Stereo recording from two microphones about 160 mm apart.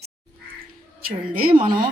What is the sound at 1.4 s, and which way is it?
Speech, 30° right (ahead or behind).